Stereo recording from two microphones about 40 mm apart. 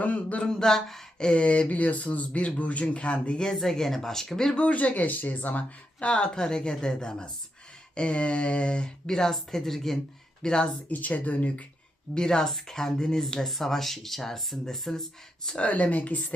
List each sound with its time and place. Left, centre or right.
0.0 s speech: left
0.4 s speech: centre
1.2 s speech: left
3.4 s speech: centre
4.5 s speech: left
6.0 s speech: left; by 10.0 s centre
10.4 s speech: left
10.8 s speech: left
12.1 s speech: centre
15.5 s speech: left